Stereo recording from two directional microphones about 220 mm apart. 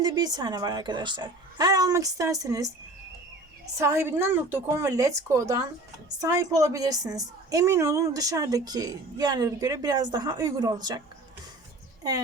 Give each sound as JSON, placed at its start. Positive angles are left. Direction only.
{"t": 0.0, "sound": "a woman's voice", "side_deg": -20}
{"t": 3.8, "sound": "a woman's voice", "side_deg": -15}